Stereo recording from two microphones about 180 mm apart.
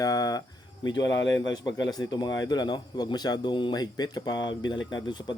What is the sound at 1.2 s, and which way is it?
Speech, 90° left.